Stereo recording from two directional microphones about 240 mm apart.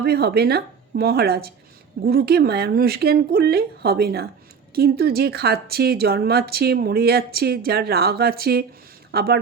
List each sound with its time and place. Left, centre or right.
0.0 s speech: right